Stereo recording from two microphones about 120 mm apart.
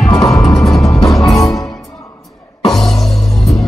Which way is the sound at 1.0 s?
30° left (ahead or behind).